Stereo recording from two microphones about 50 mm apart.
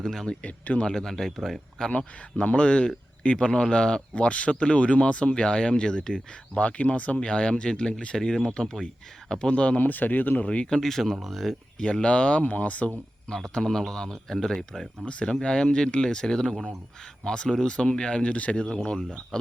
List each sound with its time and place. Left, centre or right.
0.0 s a man's voice: centre
0.4 s speech: left
0.9 s a man's voice: centre
1.9 s speech: left
9.5 s speech: left
9.8 s speech: left
10.4 s speech: left
10.7 s speech: centre
11.8 s speech: left
13.2 s a man's voice: centre
15.0 s a man's voice: centre